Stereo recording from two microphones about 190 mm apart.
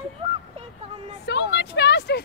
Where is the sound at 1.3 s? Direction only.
65° left (ahead or behind).